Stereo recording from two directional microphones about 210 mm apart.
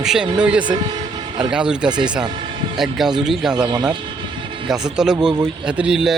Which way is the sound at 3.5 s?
20° right (ahead or behind).